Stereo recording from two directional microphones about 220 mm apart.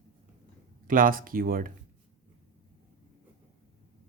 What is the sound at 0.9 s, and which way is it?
Speech, 40° right (ahead or behind).